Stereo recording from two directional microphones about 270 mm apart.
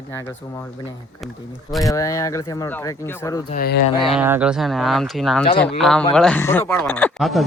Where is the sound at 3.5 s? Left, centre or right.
Left.